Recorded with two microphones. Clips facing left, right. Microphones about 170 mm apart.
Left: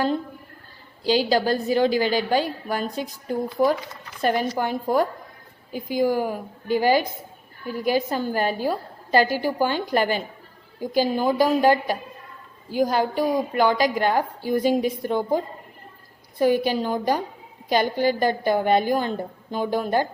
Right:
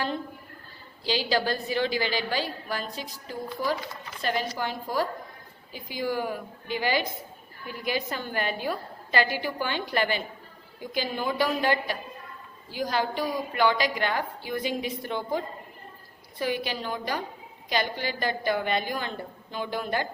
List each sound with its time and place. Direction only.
1.0 s a woman's voice: 45° left (ahead or behind)
16.4 s a woman's voice: 45° left (ahead or behind)